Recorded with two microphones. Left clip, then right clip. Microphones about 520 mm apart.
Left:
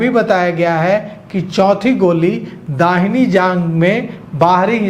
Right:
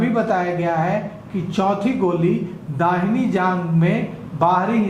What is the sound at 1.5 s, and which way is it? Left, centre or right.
A woman's voice, left.